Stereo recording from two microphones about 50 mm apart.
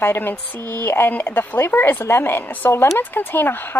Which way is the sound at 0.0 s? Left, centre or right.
Left.